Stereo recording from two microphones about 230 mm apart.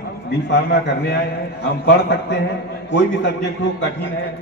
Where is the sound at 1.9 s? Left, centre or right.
Left.